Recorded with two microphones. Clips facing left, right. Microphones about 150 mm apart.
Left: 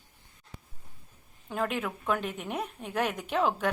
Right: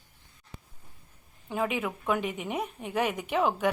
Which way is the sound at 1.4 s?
5° right (ahead or behind).